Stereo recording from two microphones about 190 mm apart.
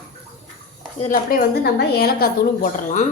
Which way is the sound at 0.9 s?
45° left (ahead or behind).